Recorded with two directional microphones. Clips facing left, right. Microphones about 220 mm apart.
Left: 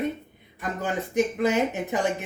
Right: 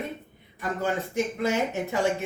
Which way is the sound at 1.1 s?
15° left (ahead or behind).